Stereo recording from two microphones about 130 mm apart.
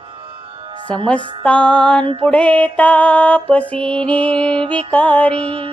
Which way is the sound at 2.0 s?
45° right (ahead or behind).